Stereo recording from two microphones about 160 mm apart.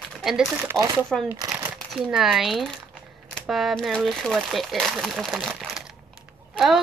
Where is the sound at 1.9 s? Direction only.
Centre (ahead or behind).